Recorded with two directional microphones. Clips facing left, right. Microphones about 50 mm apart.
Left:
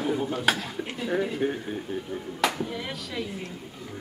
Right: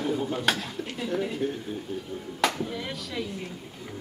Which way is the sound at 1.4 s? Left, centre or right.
Left.